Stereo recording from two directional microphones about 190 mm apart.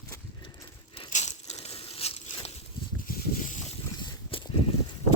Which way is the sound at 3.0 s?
40° left (ahead or behind).